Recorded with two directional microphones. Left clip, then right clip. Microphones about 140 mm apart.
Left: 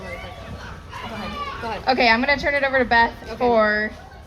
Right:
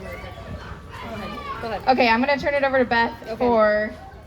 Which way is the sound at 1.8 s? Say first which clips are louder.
Left 1 dB; 45° right (ahead or behind).